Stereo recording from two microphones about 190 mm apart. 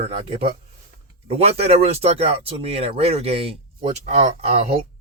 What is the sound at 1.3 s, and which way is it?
Speech, 35° right (ahead or behind).